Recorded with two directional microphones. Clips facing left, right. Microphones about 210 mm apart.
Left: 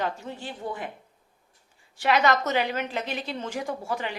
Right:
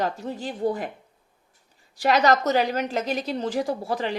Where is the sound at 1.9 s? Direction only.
35° right (ahead or behind).